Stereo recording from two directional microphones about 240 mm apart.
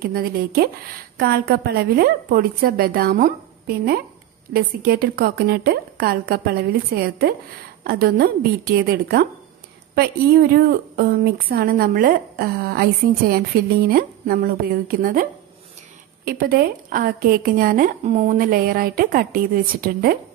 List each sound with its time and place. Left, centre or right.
0.0 s a woman's voice: right
16.3 s a woman's voice: right